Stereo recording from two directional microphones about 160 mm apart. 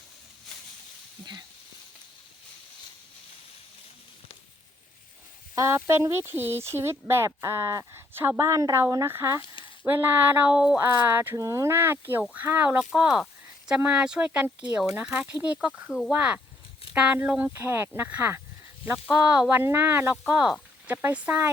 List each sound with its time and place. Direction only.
5.5 s speech: 15° right (ahead or behind)